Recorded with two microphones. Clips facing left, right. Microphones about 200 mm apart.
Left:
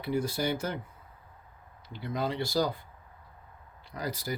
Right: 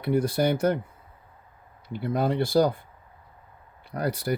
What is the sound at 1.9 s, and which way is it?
Speech, 55° right (ahead or behind).